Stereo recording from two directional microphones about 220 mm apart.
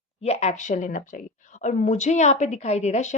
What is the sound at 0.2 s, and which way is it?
A woman's voice, 30° left (ahead or behind).